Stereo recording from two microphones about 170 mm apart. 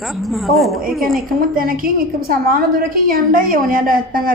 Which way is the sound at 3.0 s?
55° right (ahead or behind).